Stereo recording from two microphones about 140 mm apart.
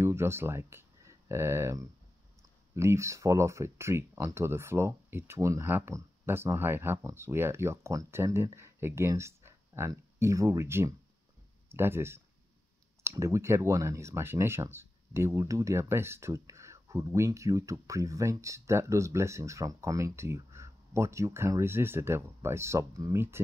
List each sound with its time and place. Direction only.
0.0 s speech: 15° right (ahead or behind)